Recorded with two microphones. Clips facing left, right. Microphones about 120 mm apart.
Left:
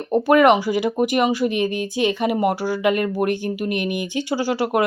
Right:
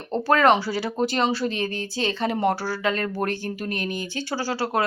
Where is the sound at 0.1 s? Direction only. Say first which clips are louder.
Left 4 dB; 15° left (ahead or behind).